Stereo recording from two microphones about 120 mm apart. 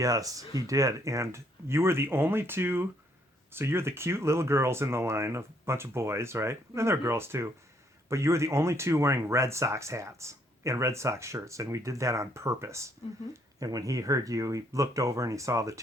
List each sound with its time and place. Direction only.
0.0 s speech: 30° right (ahead or behind)